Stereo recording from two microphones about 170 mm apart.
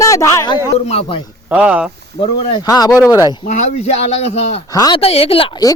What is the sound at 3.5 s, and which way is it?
Speech, 40° left (ahead or behind).